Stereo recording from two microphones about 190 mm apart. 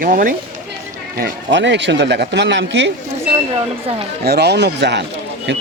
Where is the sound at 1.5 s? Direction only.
70° right (ahead or behind).